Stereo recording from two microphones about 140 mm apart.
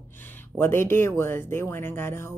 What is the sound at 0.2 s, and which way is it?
Speech, 15° left (ahead or behind).